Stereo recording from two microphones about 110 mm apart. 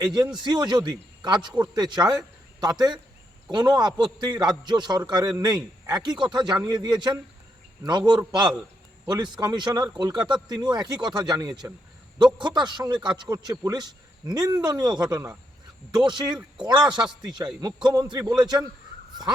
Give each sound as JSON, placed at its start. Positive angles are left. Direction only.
{"t": 0.0, "sound": "a man's voice", "side_deg": -40}